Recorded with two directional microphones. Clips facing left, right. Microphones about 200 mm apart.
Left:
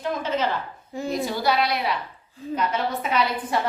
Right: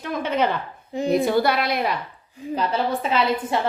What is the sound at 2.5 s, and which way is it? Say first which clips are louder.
A woman's voice: right 2 dB; 30° right (ahead or behind).